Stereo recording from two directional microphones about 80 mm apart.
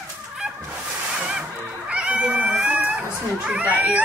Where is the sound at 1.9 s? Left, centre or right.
Centre.